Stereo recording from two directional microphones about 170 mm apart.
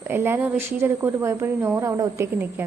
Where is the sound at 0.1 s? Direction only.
15° right (ahead or behind).